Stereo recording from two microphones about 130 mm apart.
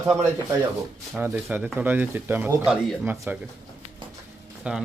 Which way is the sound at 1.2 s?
20° right (ahead or behind).